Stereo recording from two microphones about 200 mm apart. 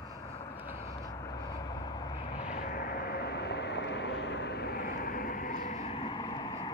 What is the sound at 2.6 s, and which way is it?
Vehicle, 45° left (ahead or behind).